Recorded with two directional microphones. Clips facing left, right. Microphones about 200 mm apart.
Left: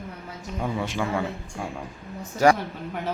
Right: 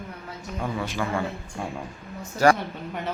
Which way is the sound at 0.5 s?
15° left (ahead or behind).